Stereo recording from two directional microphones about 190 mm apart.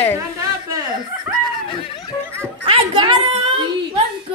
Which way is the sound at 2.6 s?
30° right (ahead or behind).